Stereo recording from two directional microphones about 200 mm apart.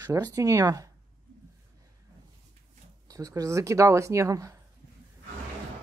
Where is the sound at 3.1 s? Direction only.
15° right (ahead or behind).